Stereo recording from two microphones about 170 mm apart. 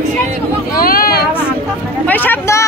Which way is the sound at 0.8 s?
60° left (ahead or behind).